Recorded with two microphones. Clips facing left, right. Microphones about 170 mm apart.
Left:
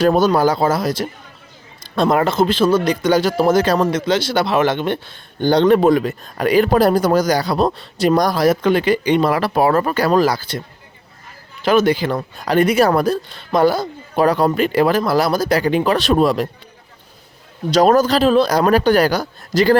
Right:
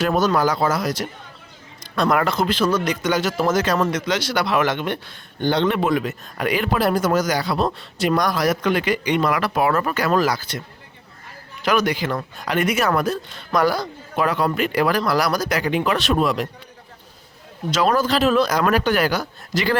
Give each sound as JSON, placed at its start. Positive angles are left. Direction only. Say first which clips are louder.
{"t": 0.0, "sound": "speech", "louder": "left 5 dB", "side_deg": 30}
{"t": 11.6, "sound": "speech", "louder": "left 6 dB", "side_deg": 30}
{"t": 17.7, "sound": "speech", "louder": "left 6 dB", "side_deg": 40}